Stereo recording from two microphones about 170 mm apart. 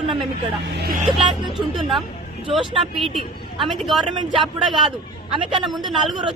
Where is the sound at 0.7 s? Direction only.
65° right (ahead or behind).